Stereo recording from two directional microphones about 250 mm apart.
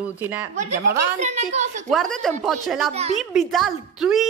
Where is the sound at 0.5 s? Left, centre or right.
Right.